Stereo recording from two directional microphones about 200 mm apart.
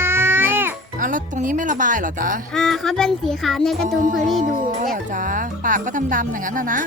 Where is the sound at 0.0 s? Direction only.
10° right (ahead or behind).